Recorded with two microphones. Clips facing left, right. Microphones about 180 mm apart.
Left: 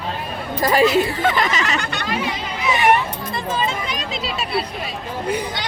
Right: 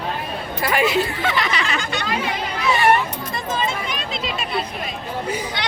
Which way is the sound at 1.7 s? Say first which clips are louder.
Even; 60° left (ahead or behind).